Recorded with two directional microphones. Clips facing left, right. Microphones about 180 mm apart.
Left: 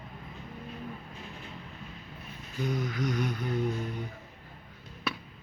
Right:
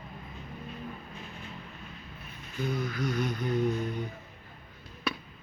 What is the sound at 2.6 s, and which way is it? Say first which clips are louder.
Speech: even; 20° left (ahead or behind).